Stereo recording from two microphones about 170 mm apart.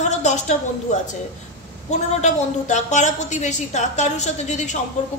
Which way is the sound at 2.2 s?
45° left (ahead or behind).